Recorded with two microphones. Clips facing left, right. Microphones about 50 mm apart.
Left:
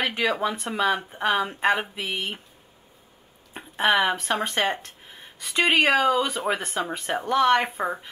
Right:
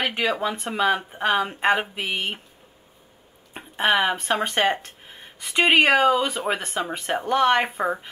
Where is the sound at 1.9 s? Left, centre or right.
Right.